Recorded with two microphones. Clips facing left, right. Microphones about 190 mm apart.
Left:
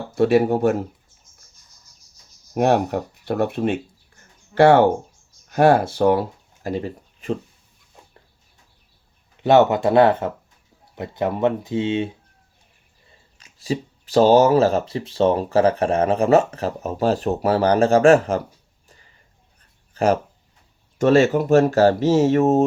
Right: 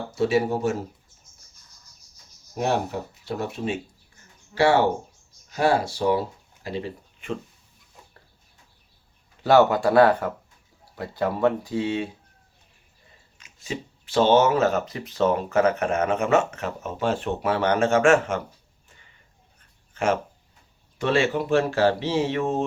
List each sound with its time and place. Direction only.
0.1 s speech: 55° left (ahead or behind)
2.6 s speech: 60° left (ahead or behind); by 7.3 s 40° left (ahead or behind)
9.4 s speech: 20° left (ahead or behind)
13.4 s speech: 35° left (ahead or behind)
18.9 s a sound: 35° left (ahead or behind)
21.0 s speech: 45° left (ahead or behind)